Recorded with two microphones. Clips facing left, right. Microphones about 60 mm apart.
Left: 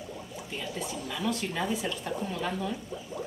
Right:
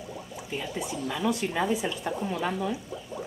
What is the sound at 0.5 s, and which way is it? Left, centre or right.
Speech, centre.